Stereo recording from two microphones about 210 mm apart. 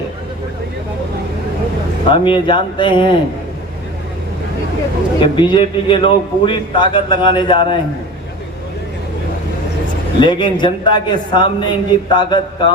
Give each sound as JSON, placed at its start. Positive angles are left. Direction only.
{"t": 2.0, "sound": "a man's voice", "side_deg": 25}
{"t": 5.2, "sound": "a man's voice", "side_deg": 20}
{"t": 10.2, "sound": "a man's voice", "side_deg": 20}